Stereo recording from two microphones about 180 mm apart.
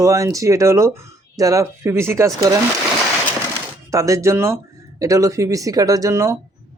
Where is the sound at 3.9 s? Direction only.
15° right (ahead or behind).